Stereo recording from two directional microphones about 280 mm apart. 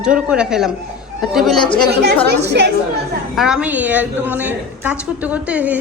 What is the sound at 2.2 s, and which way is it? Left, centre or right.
Speech, right.